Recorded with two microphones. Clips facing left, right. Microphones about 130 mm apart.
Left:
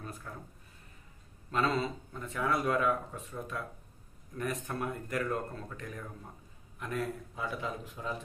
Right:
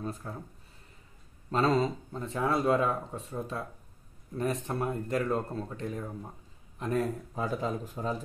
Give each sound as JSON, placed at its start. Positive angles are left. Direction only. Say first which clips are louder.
{"t": 0.0, "sound": "speech", "louder": "right 6 dB", "side_deg": -30}
{"t": 1.5, "sound": "speech", "louder": "right 5 dB", "side_deg": -35}
{"t": 6.8, "sound": "speech", "louder": "right 6 dB", "side_deg": -40}